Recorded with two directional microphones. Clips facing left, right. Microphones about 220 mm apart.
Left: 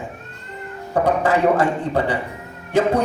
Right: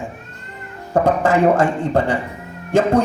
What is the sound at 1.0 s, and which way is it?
A man's voice, 45° right (ahead or behind).